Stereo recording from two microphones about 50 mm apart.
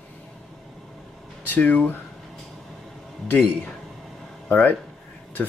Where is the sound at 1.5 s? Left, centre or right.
Left.